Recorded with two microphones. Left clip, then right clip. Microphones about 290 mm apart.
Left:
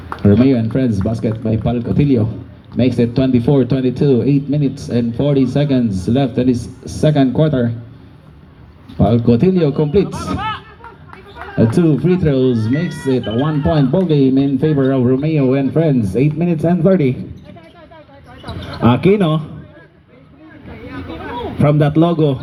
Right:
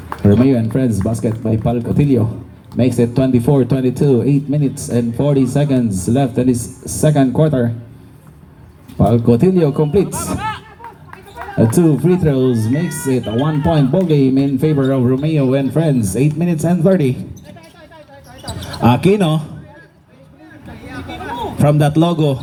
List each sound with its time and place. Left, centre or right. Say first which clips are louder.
0.2 s speech: even; right
9.0 s speech: right 1 dB; right
18.4 s speech: right 1 dB; right
20.9 s a sound: right 2 dB; right
21.4 s a man's voice: even; right